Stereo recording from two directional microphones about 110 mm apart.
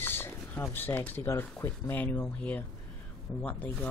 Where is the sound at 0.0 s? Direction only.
20° left (ahead or behind).